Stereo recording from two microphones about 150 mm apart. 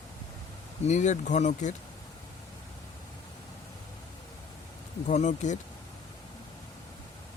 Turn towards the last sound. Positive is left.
turn(degrees=50)  # may be behind; listen again after turning